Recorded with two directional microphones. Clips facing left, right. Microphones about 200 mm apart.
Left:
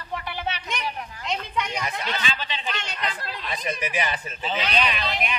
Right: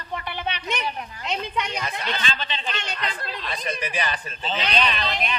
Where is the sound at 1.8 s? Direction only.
10° left (ahead or behind).